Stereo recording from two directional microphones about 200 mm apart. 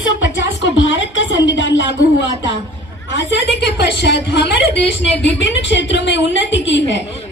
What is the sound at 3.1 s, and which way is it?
Speech, 60° left (ahead or behind).